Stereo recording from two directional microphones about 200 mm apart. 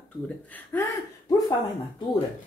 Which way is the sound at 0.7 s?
10° left (ahead or behind).